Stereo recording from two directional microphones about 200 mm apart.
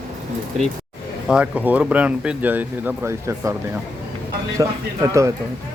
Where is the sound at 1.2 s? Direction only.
5° right (ahead or behind).